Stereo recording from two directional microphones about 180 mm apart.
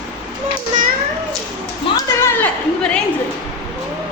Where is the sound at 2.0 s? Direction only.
15° left (ahead or behind).